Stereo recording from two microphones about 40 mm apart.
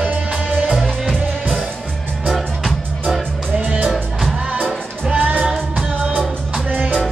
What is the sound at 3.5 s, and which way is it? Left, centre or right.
Music, right.